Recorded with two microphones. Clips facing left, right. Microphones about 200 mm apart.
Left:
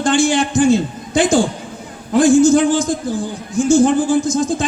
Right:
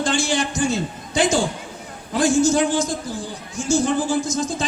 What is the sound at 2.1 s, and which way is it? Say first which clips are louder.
A man's voice: left 7 dB; 55° left (ahead or behind).